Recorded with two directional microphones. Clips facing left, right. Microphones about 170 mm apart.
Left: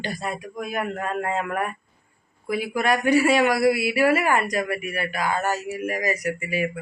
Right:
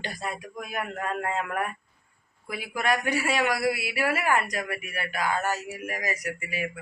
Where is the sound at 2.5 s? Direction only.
65° left (ahead or behind).